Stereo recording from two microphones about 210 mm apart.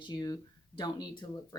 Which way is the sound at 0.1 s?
20° left (ahead or behind).